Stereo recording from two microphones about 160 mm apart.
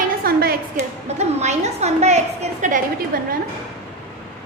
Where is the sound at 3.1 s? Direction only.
65° right (ahead or behind).